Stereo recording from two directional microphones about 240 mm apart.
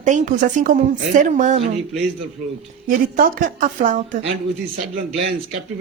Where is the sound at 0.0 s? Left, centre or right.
Right.